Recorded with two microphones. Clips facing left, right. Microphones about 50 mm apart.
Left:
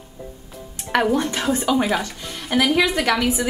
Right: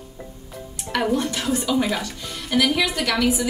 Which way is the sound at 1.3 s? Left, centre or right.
Left.